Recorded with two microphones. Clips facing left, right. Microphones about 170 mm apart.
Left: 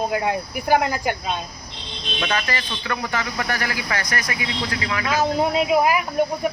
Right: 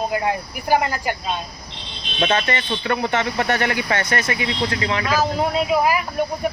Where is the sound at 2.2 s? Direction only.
25° right (ahead or behind).